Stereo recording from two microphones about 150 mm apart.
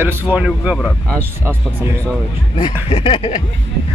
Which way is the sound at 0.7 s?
5° left (ahead or behind).